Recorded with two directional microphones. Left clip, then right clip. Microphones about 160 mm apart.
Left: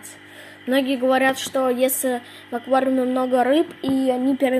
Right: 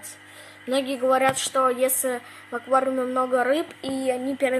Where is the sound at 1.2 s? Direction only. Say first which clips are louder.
Left 2 dB; 10° left (ahead or behind).